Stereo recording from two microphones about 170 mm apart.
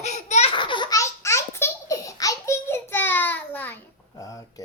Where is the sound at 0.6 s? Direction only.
30° left (ahead or behind).